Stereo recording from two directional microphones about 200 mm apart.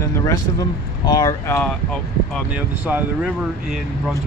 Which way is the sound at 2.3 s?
5° right (ahead or behind).